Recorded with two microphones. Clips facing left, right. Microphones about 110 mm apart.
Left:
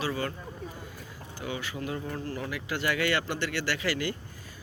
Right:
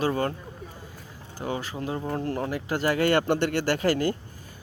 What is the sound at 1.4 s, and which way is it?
Speech, 40° right (ahead or behind).